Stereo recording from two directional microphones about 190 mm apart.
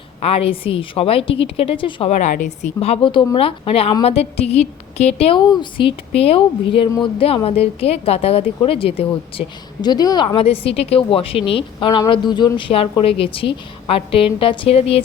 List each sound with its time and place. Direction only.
0.2 s a woman's voice: 30° left (ahead or behind)